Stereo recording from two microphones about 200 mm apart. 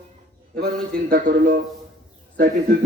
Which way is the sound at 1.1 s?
40° right (ahead or behind).